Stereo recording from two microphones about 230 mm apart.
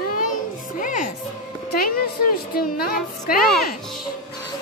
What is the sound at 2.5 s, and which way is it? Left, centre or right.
Speech, left.